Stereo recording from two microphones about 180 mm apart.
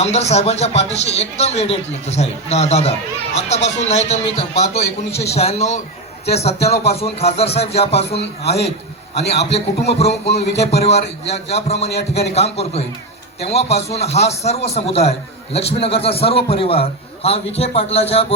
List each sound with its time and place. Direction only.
0.0 s a man's voice: 35° left (ahead or behind)
8.2 s a man's voice: 65° left (ahead or behind)
9.6 s a man's voice: 35° left (ahead or behind)